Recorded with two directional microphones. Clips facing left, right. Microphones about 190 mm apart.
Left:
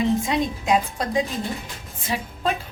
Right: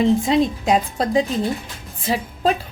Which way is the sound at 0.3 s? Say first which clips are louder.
Right 5 dB; 30° right (ahead or behind).